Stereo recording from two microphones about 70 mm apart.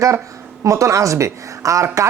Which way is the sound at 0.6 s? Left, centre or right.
Right.